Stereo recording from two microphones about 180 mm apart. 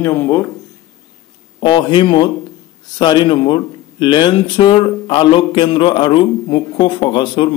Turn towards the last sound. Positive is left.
turn(degrees=25)  # may be behind; listen again after turning